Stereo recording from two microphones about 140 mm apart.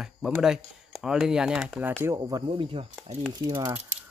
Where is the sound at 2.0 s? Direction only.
25° right (ahead or behind).